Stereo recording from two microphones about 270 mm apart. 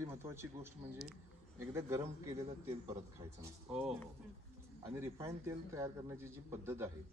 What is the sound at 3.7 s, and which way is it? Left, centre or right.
Speech, centre.